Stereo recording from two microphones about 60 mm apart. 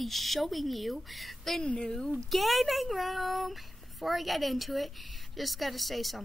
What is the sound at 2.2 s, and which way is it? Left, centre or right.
Speech, centre.